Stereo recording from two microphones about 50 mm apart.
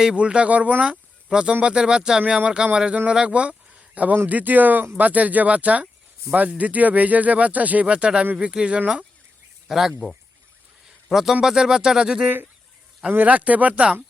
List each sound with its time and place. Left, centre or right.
0.0 s speech: centre
1.3 s speech: centre
9.6 s speech: centre
11.1 s speech: centre
13.1 s speech: right